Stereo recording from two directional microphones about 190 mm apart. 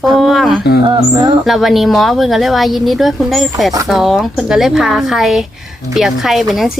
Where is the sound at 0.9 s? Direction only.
25° right (ahead or behind).